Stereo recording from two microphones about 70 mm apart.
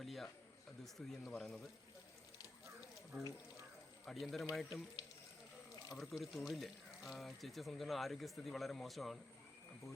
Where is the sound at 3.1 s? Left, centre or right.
Right.